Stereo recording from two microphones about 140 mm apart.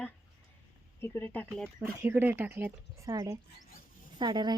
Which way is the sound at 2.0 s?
15° right (ahead or behind).